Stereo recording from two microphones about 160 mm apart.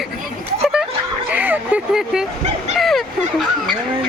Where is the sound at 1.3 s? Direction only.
10° right (ahead or behind).